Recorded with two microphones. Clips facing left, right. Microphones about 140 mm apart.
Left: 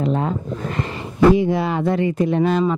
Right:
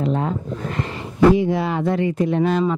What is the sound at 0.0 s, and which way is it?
Speech, 20° left (ahead or behind).